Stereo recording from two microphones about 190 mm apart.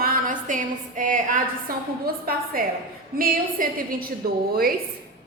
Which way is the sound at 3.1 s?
50° right (ahead or behind).